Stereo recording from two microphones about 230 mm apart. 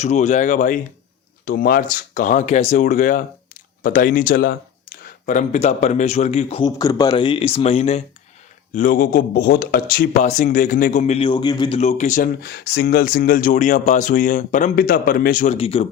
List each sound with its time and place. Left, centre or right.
0.0 s a man's voice: left
15.5 s a man's voice: left